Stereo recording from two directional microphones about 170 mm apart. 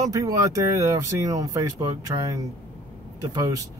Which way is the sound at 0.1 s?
20° right (ahead or behind).